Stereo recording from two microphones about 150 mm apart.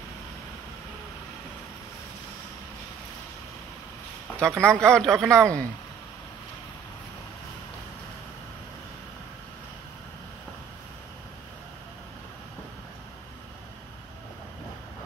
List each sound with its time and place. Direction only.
4.4 s speech: 5° left (ahead or behind)